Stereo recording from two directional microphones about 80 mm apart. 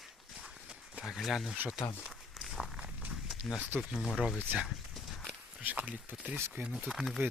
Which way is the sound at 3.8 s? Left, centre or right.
Centre.